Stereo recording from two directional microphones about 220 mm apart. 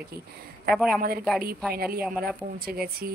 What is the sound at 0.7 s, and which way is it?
Speech, centre (ahead or behind).